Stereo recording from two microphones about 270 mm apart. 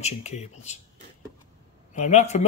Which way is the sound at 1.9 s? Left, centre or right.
Left.